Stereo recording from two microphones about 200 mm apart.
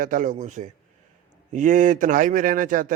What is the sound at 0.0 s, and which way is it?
Speech, 40° right (ahead or behind).